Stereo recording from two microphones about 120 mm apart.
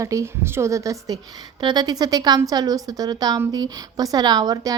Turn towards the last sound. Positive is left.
turn(degrees=-30)  # may be behind; listen again after turning